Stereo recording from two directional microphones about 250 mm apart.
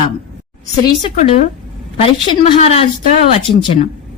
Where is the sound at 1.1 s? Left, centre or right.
Left.